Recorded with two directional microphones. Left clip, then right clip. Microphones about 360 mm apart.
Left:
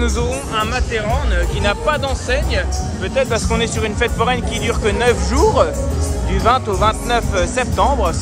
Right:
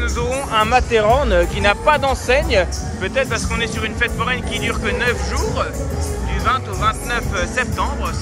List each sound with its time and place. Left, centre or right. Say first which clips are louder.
0.0 s speech: left 1 dB; centre